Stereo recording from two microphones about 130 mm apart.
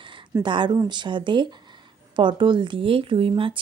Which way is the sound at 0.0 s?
40° right (ahead or behind).